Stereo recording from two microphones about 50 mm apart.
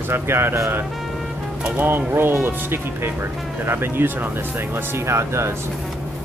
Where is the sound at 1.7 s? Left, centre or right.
Right.